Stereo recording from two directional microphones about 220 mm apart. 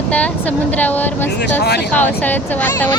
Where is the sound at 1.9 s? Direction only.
10° left (ahead or behind).